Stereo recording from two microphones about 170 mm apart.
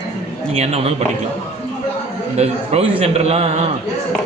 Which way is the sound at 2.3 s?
35° right (ahead or behind).